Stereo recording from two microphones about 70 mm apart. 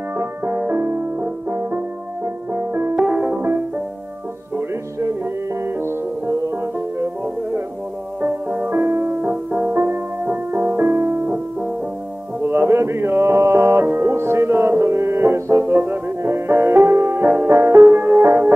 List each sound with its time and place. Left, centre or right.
0.2 s music: right
2.5 s music: right
3.0 s music: centre
8.2 s music: right